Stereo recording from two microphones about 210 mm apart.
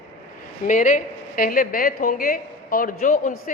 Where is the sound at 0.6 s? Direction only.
35° left (ahead or behind).